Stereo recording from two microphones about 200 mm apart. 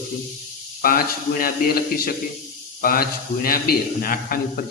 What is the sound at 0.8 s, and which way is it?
A man's voice, 45° left (ahead or behind).